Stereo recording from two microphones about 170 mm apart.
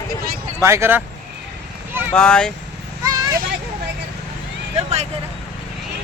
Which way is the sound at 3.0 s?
20° right (ahead or behind).